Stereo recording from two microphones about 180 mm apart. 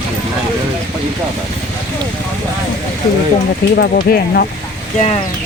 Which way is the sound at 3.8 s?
60° left (ahead or behind).